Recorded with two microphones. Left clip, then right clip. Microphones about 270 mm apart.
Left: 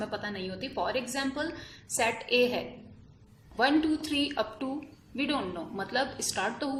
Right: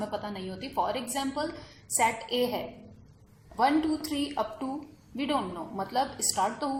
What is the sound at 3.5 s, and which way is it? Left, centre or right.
A woman's voice, left.